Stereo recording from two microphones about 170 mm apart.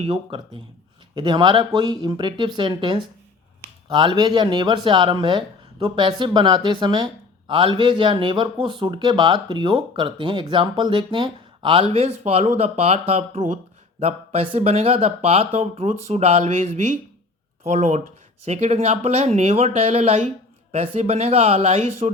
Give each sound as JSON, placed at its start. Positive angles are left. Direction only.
{"t": 0.0, "sound": "speech", "side_deg": -35}